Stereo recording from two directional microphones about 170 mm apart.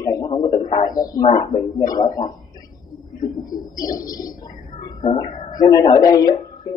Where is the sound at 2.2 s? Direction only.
25° left (ahead or behind).